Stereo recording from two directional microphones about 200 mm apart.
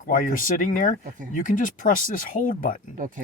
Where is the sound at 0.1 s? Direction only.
45° left (ahead or behind).